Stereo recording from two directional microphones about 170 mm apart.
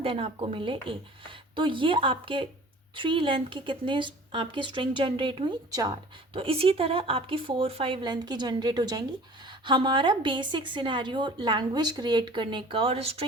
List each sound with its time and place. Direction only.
0.0 s a woman's voice: 35° right (ahead or behind)